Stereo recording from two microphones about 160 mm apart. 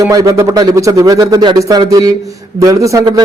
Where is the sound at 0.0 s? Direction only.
20° right (ahead or behind).